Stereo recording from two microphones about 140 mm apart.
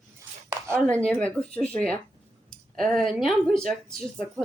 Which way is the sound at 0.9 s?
10° left (ahead or behind).